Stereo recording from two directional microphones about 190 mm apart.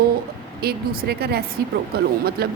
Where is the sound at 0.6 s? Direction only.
55° right (ahead or behind).